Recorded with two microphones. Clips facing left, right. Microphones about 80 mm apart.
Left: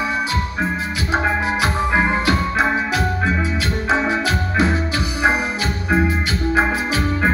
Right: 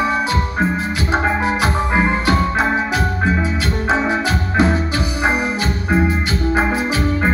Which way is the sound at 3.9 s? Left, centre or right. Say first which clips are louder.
Right 1 dB; right.